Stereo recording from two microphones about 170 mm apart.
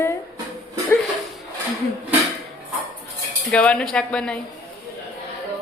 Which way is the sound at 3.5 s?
5° left (ahead or behind).